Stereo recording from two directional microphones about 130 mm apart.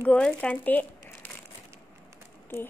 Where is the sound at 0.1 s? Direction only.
10° left (ahead or behind).